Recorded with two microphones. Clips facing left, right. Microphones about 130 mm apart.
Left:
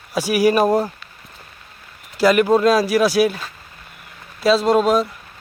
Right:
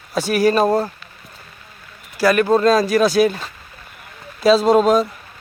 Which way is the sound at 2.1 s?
20° left (ahead or behind).